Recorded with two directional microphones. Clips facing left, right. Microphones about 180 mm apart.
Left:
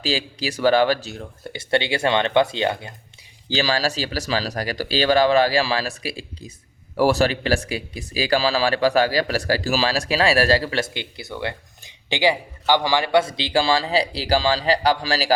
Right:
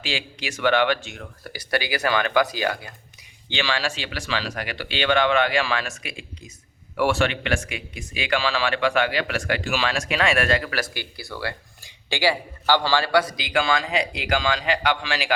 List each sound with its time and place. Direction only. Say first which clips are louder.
0.0 s speech: left 6 dB; 35° left (ahead or behind)
3.5 s speech: left 4 dB; 40° left (ahead or behind)